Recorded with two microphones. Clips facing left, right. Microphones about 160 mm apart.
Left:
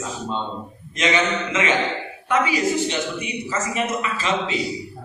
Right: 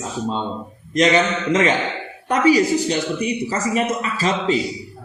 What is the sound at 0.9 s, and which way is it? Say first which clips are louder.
A woman's voice: right 5 dB; 40° right (ahead or behind).